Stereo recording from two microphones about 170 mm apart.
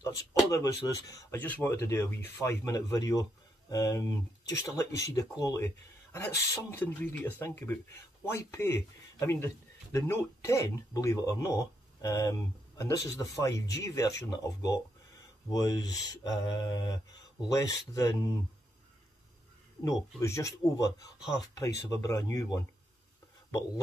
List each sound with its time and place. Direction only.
0.0 s speech: 20° left (ahead or behind)
20.2 s speech: 20° left (ahead or behind)